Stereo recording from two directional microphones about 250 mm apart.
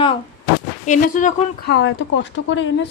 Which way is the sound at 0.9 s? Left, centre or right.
Left.